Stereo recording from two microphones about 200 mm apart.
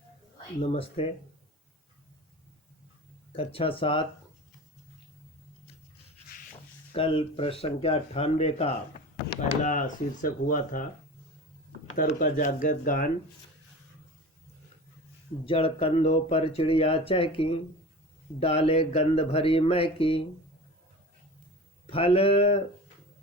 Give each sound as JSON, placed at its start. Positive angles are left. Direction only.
{"t": 0.6, "sound": "speech", "side_deg": 30}
{"t": 3.3, "sound": "speech", "side_deg": 30}
{"t": 6.9, "sound": "speech", "side_deg": 25}
{"t": 11.9, "sound": "speech", "side_deg": 40}
{"t": 15.4, "sound": "speech", "side_deg": 30}
{"t": 21.8, "sound": "speech", "side_deg": 30}